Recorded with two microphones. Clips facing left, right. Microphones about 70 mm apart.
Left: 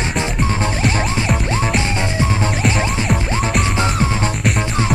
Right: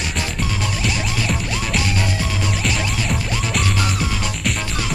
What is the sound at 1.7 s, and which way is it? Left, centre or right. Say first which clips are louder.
Music: left 3 dB; left.